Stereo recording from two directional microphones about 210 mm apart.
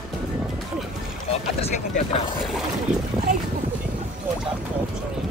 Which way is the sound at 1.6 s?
30° left (ahead or behind).